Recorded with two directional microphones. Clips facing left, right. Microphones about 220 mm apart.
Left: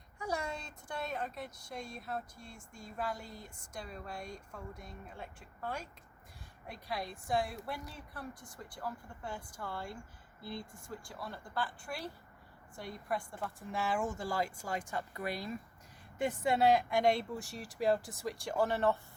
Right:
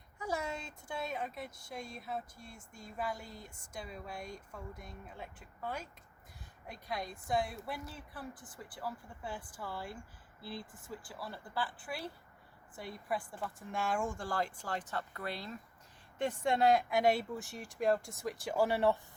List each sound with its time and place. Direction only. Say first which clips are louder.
0.2 s speech: even; 5° right (ahead or behind)
1.5 s speech: even; 25° right (ahead or behind)
2.0 s speech: even; centre (ahead or behind)